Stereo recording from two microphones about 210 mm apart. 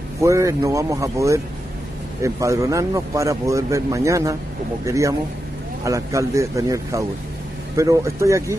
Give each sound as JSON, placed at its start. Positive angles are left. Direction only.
{"t": 0.2, "sound": "a man's voice", "side_deg": -15}